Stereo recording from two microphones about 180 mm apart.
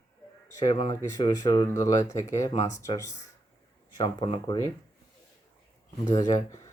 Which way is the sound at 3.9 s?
30° left (ahead or behind).